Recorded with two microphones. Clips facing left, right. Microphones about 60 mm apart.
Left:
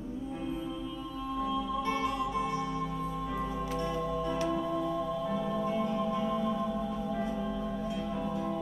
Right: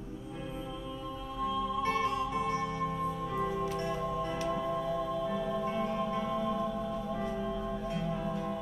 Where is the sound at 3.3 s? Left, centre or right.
Centre.